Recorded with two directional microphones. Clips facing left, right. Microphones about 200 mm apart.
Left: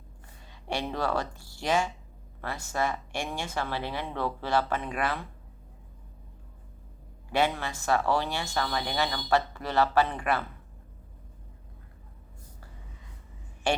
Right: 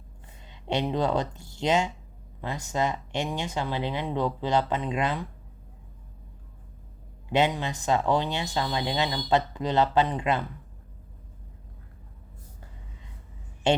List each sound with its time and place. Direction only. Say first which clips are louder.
0.4 s speech: right 5 dB; 20° right (ahead or behind)
7.3 s speech: right 3 dB; 20° right (ahead or behind)
13.7 s a woman's voice: right 5 dB; 20° right (ahead or behind)